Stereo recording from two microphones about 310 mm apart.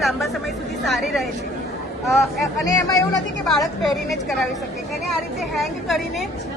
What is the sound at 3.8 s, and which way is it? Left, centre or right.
Speech, centre.